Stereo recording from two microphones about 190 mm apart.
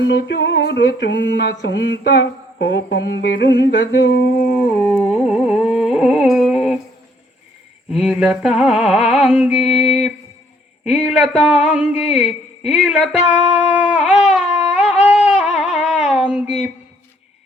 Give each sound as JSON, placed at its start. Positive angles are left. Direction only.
{"t": 0.0, "sound": "a sound", "side_deg": 70}
{"t": 5.0, "sound": "carnatic music", "side_deg": 35}
{"t": 5.3, "sound": "carnatic music", "side_deg": -5}
{"t": 7.9, "sound": "speech", "side_deg": -5}
{"t": 13.8, "sound": "a sound", "side_deg": -5}
{"t": 14.3, "sound": "music", "side_deg": -5}